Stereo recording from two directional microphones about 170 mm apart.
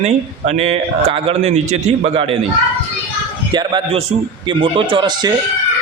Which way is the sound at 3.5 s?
30° right (ahead or behind).